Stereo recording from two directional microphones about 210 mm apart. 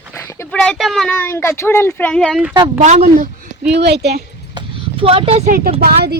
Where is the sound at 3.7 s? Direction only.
50° right (ahead or behind).